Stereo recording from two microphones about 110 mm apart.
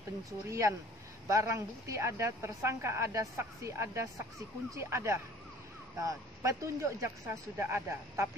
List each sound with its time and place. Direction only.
0.5 s a woman's voice: 25° right (ahead or behind)